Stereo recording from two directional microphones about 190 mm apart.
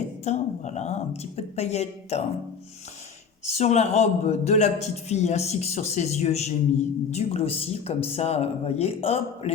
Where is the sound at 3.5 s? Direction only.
35° left (ahead or behind).